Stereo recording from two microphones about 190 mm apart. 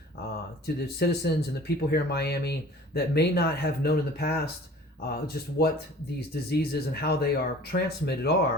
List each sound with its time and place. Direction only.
0.2 s speech: 55° left (ahead or behind)